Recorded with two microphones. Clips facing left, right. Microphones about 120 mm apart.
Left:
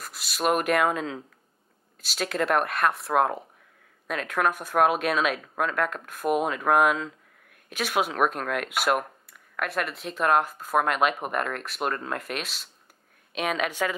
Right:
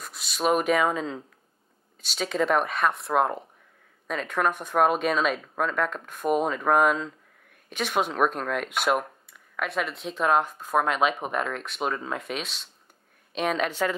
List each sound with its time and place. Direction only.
0.0 s a woman's voice: centre (ahead or behind)